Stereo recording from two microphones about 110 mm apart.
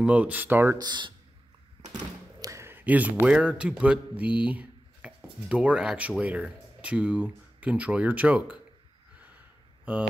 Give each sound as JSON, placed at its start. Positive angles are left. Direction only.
{"t": 0.0, "sound": "speech", "side_deg": -15}
{"t": 0.7, "sound": "speech", "side_deg": -40}
{"t": 1.8, "sound": "thunk", "side_deg": -75}
{"t": 2.4, "sound": "a man's voice", "side_deg": -25}